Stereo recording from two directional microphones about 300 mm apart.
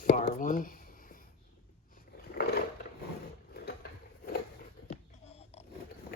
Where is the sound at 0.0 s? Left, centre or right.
Left.